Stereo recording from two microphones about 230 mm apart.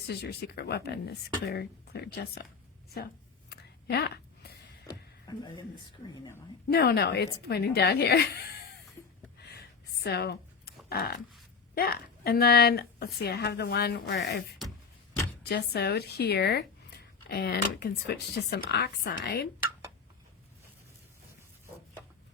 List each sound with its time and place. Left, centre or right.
0.1 s speech: left
3.5 s a sound: left
6.7 s speech: left
9.5 s a sound: left
11.7 s a woman's voice: left
15.4 s speech: left